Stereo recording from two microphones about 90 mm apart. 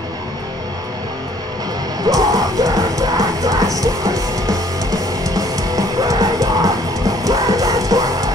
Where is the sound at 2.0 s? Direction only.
45° right (ahead or behind).